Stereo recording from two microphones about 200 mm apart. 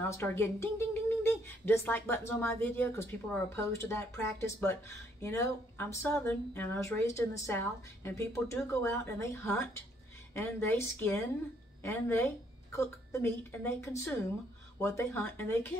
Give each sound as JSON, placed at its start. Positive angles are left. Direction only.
{"t": 0.0, "sound": "speech", "side_deg": 10}